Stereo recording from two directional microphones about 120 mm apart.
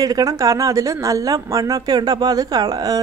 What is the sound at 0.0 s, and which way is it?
Speech, 30° right (ahead or behind).